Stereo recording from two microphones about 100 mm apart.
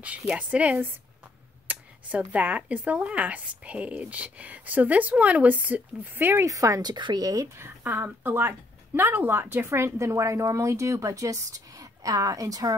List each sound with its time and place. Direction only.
0.3 s speech: 10° right (ahead or behind)
6.4 s speech: 35° right (ahead or behind)
7.5 s a woman's voice: 20° right (ahead or behind)